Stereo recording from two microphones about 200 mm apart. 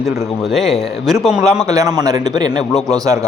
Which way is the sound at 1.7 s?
15° right (ahead or behind).